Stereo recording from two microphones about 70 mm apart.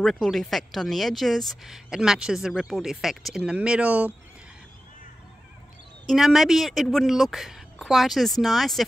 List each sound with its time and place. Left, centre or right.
0.0 s speech: centre
1.9 s speech: centre
3.5 s speech: centre
6.0 s speech: centre